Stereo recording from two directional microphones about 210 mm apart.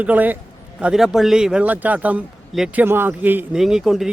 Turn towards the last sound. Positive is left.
turn(degrees=0)  # may be behind; listen again after turning